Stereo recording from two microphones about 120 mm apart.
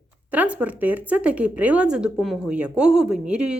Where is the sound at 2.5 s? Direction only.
10° right (ahead or behind).